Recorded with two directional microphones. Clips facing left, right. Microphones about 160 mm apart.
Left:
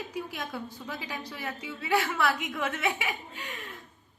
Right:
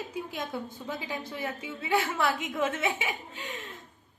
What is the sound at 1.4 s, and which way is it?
Speech, 20° right (ahead or behind).